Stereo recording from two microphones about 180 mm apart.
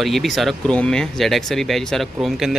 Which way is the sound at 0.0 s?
Centre (ahead or behind).